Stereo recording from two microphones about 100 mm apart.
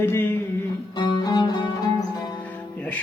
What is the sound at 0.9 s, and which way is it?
Music, 40° left (ahead or behind).